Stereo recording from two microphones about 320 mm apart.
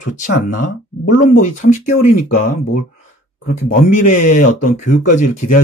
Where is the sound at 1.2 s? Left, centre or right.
Left.